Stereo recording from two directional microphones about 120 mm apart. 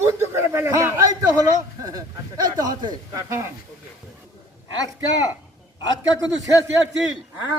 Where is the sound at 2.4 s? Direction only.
35° right (ahead or behind).